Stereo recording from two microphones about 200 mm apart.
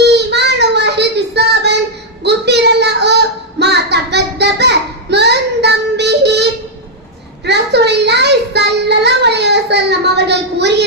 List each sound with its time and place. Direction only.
0.0 s child singing: 55° right (ahead or behind)